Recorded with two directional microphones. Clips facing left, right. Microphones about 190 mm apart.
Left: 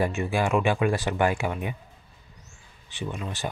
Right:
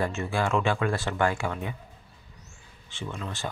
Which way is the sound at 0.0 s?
15° left (ahead or behind).